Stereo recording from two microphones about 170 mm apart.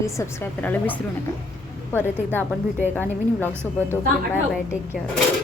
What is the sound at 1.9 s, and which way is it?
A woman's voice, 10° left (ahead or behind).